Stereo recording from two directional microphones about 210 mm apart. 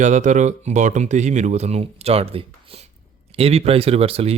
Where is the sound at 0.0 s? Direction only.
35° right (ahead or behind).